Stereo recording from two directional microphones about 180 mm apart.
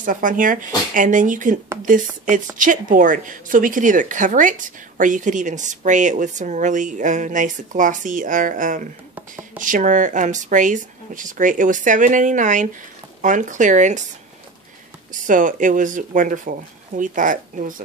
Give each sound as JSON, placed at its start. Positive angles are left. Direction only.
{"t": 0.0, "sound": "speech", "side_deg": -45}
{"t": 15.2, "sound": "speech", "side_deg": -45}